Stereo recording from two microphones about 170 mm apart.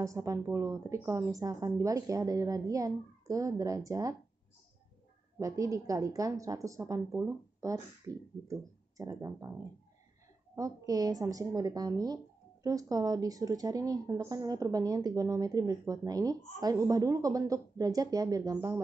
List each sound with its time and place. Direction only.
0.0 s speech: 20° right (ahead or behind)
5.4 s speech: 20° right (ahead or behind)
10.5 s speech: 20° right (ahead or behind)